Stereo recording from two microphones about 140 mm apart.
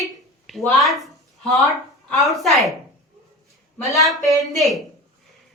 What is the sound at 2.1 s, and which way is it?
Speech, centre (ahead or behind).